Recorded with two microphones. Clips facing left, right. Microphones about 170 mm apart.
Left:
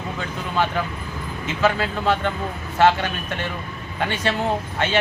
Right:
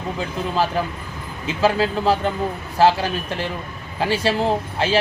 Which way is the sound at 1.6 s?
35° right (ahead or behind).